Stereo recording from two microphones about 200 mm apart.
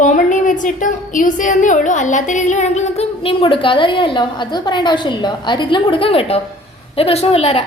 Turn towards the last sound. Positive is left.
turn(degrees=30)  # may be behind; listen again after turning